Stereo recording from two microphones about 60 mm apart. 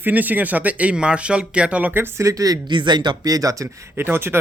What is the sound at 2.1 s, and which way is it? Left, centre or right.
Speech, right.